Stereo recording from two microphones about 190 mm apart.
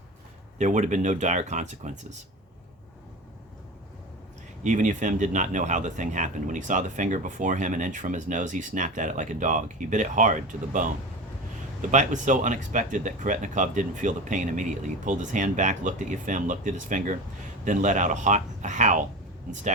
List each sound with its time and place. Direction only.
0.6 s speech: 40° right (ahead or behind)
4.6 s speech: 40° right (ahead or behind)